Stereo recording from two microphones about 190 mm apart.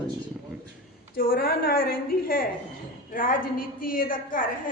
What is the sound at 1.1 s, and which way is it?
A woman's voice, 50° left (ahead or behind).